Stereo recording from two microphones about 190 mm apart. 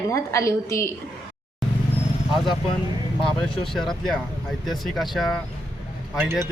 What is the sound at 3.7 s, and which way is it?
Speech, centre (ahead or behind).